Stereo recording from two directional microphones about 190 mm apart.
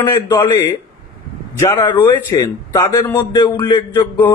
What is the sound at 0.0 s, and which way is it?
A man's voice, 20° left (ahead or behind).